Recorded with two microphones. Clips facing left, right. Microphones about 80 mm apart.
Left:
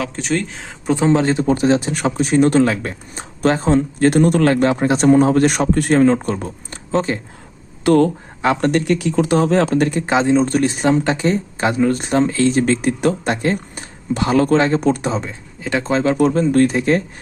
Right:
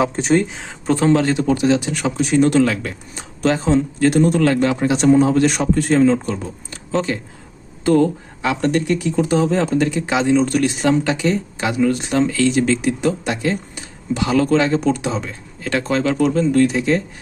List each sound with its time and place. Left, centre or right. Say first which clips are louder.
0.0 s speech: right 5 dB; right
0.5 s speech: even; centre
0.9 s speech: even; centre
1.2 s speech: left 1 dB; left
4.6 s a man's voice: left 1 dB; left
7.9 s speech: left 2 dB; left
8.4 s speech: left 2 dB; left
8.9 s speech: left 2 dB; left
9.8 s speech: left 2 dB; left
15.1 s speech: left 2 dB; left
15.8 s speech: left 2 dB; left
16.1 s a man's voice: left 1 dB; left